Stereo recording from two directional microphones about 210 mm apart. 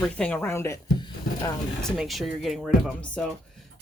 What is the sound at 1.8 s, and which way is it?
Speech, centre (ahead or behind).